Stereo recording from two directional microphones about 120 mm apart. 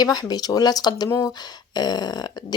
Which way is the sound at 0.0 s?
35° left (ahead or behind).